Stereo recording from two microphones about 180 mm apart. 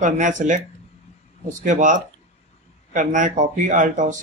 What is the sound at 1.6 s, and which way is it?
Speech, 45° right (ahead or behind).